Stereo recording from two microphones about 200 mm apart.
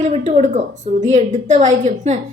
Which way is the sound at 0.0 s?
35° right (ahead or behind).